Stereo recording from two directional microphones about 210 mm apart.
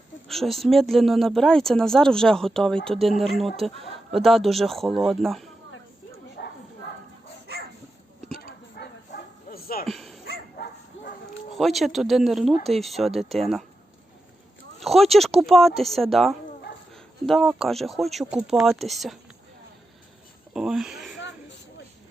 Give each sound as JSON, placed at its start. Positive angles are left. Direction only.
{"t": 0.3, "sound": "speech", "side_deg": 0}
{"t": 6.4, "sound": "bow-wow", "side_deg": 50}
{"t": 7.5, "sound": "dog", "side_deg": -50}
{"t": 8.4, "sound": "bow-wow", "side_deg": 50}
{"t": 9.9, "sound": "dog", "side_deg": 0}
{"t": 10.6, "sound": "bow-wow", "side_deg": 50}
{"t": 11.0, "sound": "bow-wow", "side_deg": 65}
{"t": 11.5, "sound": "speech", "side_deg": 0}
{"t": 14.8, "sound": "speech", "side_deg": 0}
{"t": 20.5, "sound": "speech", "side_deg": 0}